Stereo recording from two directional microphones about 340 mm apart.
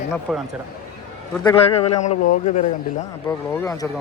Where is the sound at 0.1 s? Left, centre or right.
Centre.